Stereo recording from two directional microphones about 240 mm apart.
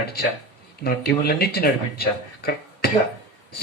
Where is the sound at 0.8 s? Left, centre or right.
Left.